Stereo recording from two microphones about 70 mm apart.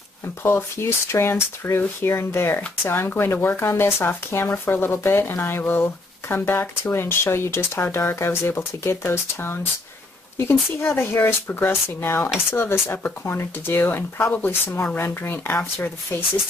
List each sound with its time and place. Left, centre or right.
0.4 s speech: left